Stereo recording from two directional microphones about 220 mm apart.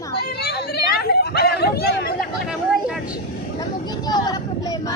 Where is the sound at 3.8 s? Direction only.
20° left (ahead or behind).